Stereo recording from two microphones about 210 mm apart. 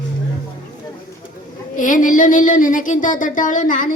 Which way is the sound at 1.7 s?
40° left (ahead or behind).